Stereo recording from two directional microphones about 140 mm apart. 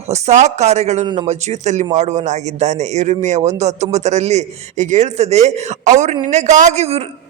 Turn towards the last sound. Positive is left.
turn(degrees=-50)  # may be behind; listen again after turning